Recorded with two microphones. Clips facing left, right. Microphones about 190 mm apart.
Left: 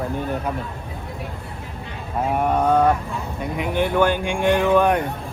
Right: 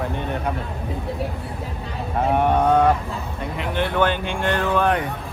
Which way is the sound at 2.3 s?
5° left (ahead or behind).